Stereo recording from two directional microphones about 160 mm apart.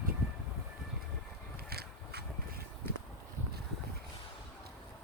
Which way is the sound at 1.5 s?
75° right (ahead or behind).